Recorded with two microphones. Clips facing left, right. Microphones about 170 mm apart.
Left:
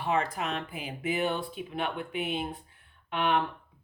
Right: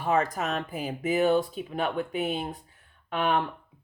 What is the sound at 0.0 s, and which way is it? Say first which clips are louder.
Speech: right 3 dB; 45° right (ahead or behind).